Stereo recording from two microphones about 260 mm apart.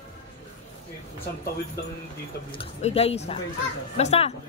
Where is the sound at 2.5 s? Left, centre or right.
Left.